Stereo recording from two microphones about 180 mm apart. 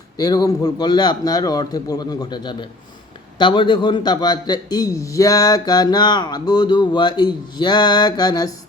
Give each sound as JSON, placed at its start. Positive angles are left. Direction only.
{"t": 0.2, "sound": "a man's voice", "side_deg": 20}